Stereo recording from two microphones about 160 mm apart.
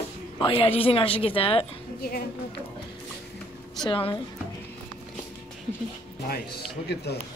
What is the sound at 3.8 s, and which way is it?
Speech, 35° left (ahead or behind).